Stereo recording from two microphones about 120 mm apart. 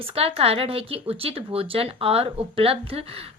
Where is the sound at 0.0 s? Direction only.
50° right (ahead or behind).